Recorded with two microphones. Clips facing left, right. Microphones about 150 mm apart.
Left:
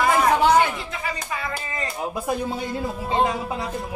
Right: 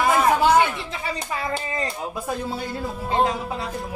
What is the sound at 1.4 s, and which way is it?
Speech, 30° right (ahead or behind).